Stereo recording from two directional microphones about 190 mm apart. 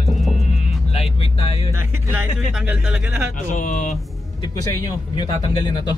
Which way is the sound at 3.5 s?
40° left (ahead or behind).